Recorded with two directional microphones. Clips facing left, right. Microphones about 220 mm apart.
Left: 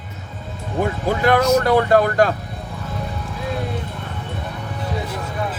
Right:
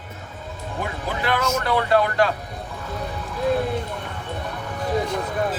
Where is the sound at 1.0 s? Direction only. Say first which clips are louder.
Left 7 dB; 45° left (ahead or behind).